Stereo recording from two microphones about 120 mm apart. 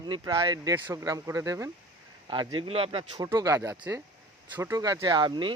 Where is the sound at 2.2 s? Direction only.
40° right (ahead or behind).